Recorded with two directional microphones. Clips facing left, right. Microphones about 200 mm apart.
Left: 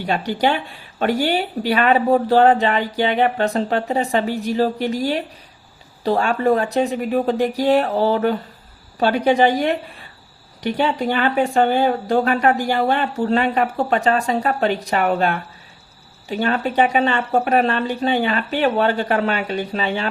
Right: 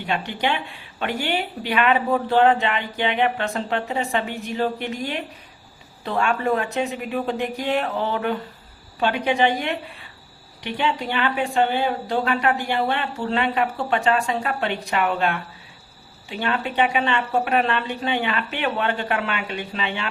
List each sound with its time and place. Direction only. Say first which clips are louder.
0.3 s speech: left 5 dB; 40° left (ahead or behind)